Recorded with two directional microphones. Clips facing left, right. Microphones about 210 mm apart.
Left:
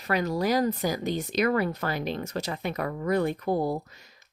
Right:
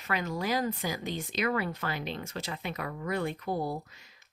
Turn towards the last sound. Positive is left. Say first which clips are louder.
# left 6 dB
turn(degrees=45)  # may be behind; listen again after turning